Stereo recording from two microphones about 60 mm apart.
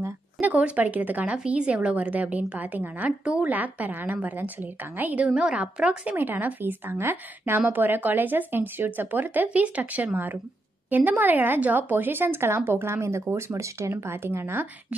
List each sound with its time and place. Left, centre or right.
0.4 s speech: right
3.1 s speech: centre
3.5 s speech: right
5.3 s a woman's voice: centre
6.1 s a woman's voice: right